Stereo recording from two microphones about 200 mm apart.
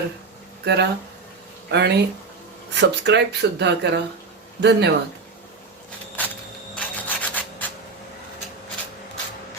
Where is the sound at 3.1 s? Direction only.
60° right (ahead or behind).